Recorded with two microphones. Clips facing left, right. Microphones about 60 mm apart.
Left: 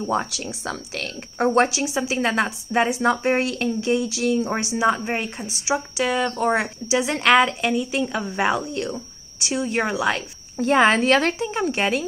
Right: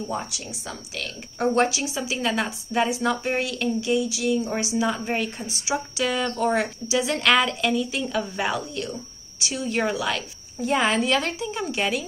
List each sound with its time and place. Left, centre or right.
0.0 s speech: left
1.4 s a woman's voice: left
5.0 s a woman's voice: left
10.6 s speech: left